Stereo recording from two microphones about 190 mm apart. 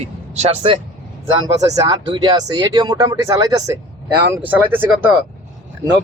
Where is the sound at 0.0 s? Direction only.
35° right (ahead or behind).